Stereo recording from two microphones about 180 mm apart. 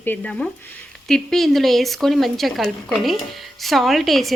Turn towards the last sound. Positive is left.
turn(degrees=0)  # may be behind; listen again after turning